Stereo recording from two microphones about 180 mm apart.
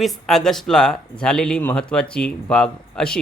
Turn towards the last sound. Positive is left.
turn(degrees=5)  # may be behind; listen again after turning